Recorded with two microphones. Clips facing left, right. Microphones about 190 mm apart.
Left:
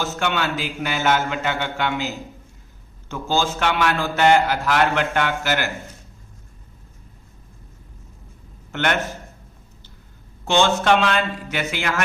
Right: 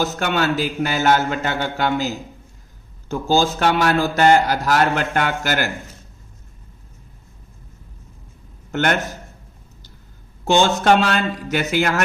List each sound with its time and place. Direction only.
0.0 s a man's voice: 40° right (ahead or behind)
8.7 s a man's voice: 40° right (ahead or behind)
10.4 s a man's voice: 40° right (ahead or behind)